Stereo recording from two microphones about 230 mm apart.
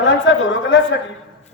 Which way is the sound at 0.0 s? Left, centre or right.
Left.